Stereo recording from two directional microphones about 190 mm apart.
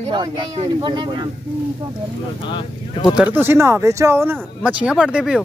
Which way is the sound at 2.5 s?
25° left (ahead or behind).